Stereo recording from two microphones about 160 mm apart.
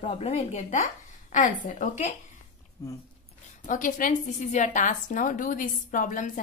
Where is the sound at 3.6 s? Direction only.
55° left (ahead or behind).